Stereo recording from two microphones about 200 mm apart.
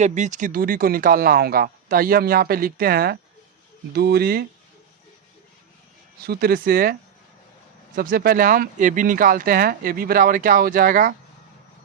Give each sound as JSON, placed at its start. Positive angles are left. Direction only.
{"t": 0.0, "sound": "speech", "side_deg": -35}
{"t": 6.2, "sound": "speech", "side_deg": -50}
{"t": 7.9, "sound": "speech", "side_deg": -45}